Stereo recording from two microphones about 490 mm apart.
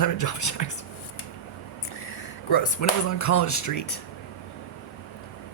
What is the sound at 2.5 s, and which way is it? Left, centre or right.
Speech, left.